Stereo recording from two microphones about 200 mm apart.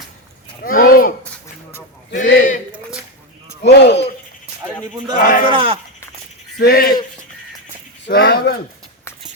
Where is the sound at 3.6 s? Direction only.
55° left (ahead or behind).